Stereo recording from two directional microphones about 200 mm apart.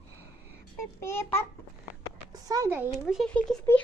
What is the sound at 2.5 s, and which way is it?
A child's voice, 10° right (ahead or behind).